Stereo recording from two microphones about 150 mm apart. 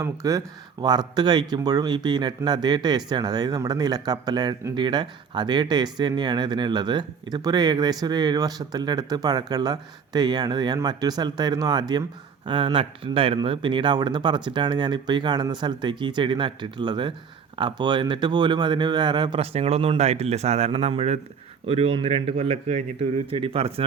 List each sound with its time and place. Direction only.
0.0 s speech: 20° right (ahead or behind); by 23.8 s 40° right (ahead or behind)